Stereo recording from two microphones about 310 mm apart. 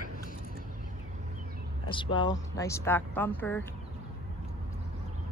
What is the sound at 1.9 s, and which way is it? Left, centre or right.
Speech, centre.